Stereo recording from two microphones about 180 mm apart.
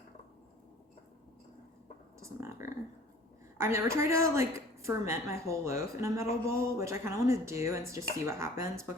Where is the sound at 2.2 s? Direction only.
15° right (ahead or behind).